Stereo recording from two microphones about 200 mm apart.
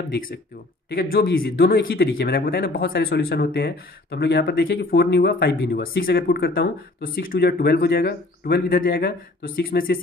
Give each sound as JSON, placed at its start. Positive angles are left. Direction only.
{"t": 0.8, "sound": "speech", "side_deg": 45}